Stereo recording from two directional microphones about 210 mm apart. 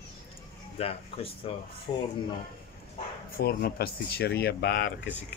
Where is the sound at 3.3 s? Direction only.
45° left (ahead or behind).